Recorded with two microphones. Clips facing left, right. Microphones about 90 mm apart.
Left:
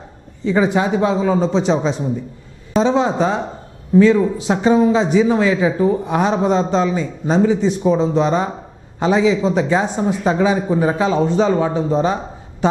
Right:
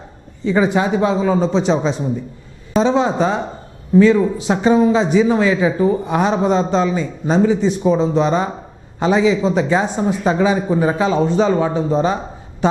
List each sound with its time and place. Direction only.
0.4 s a man's voice: 15° right (ahead or behind)